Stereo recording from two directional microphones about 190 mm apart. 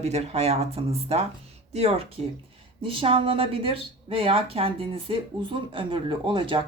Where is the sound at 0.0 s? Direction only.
35° right (ahead or behind).